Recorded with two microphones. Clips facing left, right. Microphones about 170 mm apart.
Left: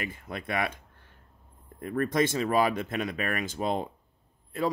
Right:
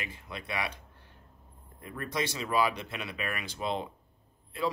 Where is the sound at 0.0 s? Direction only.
50° left (ahead or behind).